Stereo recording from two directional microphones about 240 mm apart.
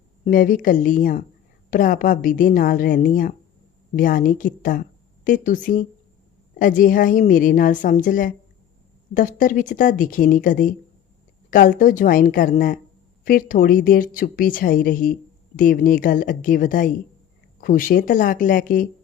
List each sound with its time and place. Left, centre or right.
0.3 s a woman's voice: left